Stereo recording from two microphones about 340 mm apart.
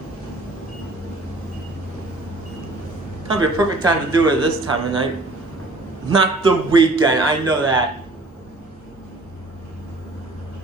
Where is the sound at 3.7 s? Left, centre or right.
Centre.